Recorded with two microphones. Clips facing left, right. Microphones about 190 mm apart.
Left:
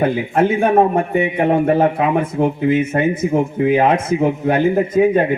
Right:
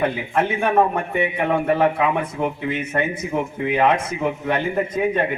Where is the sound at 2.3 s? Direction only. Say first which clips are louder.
Left 8 dB; 45° left (ahead or behind).